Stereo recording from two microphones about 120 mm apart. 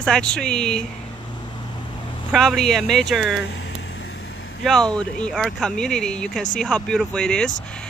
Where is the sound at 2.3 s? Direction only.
Centre (ahead or behind).